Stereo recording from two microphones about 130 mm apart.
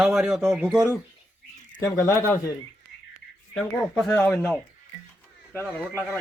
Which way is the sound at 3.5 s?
5° left (ahead or behind).